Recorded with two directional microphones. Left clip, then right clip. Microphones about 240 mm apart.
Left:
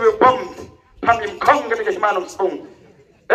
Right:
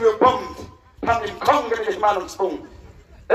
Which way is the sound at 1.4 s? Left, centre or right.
Left.